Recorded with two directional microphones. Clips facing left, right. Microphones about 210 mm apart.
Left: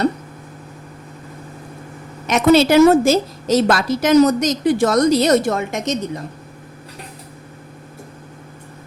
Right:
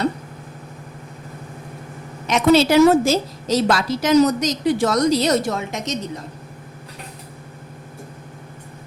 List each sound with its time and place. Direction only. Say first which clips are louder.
2.2 s a woman's voice: left 2 dB; 50° left (ahead or behind)